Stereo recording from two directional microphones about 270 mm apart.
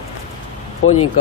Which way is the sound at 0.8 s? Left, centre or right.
Left.